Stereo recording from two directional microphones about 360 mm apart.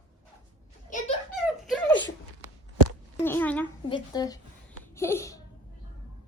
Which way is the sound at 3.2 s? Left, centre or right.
Centre.